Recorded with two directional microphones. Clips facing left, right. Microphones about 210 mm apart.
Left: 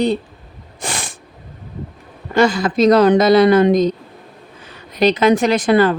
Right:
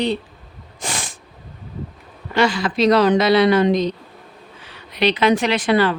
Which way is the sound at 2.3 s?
45° left (ahead or behind).